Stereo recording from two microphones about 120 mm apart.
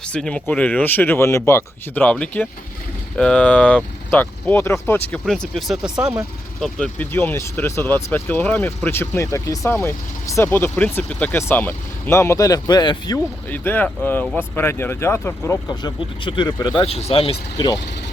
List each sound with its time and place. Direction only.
0.1 s speech: 5° left (ahead or behind)
5.5 s speech: 5° right (ahead or behind)
6.6 s speech: 5° left (ahead or behind)
7.1 s speech: 20° left (ahead or behind); by 13.1 s 40° left (ahead or behind)
13.5 s speech: 15° left (ahead or behind)
15.7 s speech: 40° left (ahead or behind)
16.8 s speech: 55° left (ahead or behind)